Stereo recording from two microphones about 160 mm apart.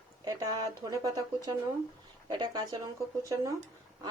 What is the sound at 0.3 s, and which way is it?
Speech, 25° right (ahead or behind).